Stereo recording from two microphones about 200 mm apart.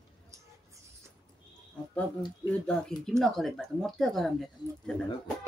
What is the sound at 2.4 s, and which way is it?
Speech, 5° left (ahead or behind).